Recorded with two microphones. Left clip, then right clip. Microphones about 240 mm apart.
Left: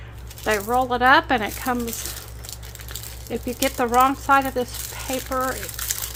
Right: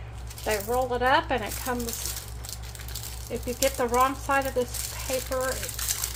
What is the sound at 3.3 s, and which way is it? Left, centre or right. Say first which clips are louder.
Speech: left 2 dB; left.